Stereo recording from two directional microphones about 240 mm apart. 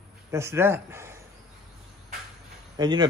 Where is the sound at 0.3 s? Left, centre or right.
Centre.